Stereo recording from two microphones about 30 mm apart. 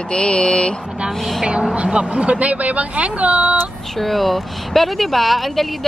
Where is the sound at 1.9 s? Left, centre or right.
Right.